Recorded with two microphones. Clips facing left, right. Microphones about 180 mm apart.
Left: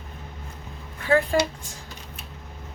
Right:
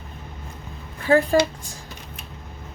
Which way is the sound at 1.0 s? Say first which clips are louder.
Right 3 dB; 35° right (ahead or behind).